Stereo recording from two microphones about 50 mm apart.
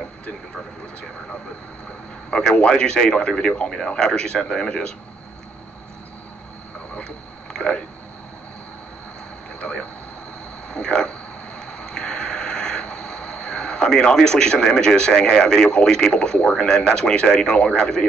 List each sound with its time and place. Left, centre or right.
2.5 s speech: centre
9.6 s speech: left
11.6 s a sound: centre
16.6 s speech: centre